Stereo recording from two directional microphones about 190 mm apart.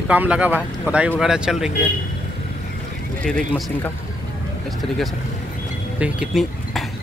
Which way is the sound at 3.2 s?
5° left (ahead or behind).